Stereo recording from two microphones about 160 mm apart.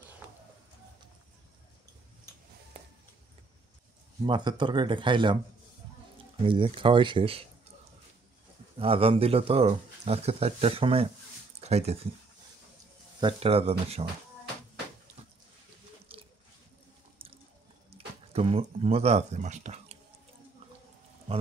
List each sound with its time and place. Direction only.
2.8 s a sound: 35° right (ahead or behind)
4.3 s speech: 30° right (ahead or behind)
6.4 s speech: 35° right (ahead or behind)
8.7 s speech: 35° right (ahead or behind)
13.2 s speech: 40° right (ahead or behind)
16.1 s squish: 35° right (ahead or behind)
17.8 s speech: 40° right (ahead or behind)